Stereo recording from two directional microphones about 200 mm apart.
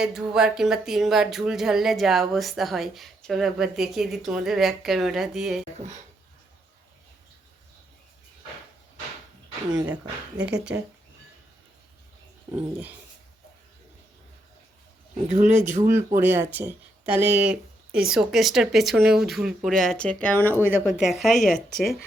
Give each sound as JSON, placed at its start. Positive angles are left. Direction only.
{"t": 0.0, "sound": "speech", "side_deg": -5}
{"t": 5.7, "sound": "a sound", "side_deg": -35}
{"t": 10.3, "sound": "speech", "side_deg": -55}
{"t": 10.6, "sound": "speech", "side_deg": -5}
{"t": 15.3, "sound": "speech", "side_deg": -35}
{"t": 15.9, "sound": "speech", "side_deg": -10}
{"t": 20.7, "sound": "speech", "side_deg": -5}